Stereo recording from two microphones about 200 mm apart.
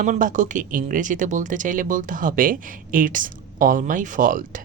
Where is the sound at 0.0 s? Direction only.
40° right (ahead or behind).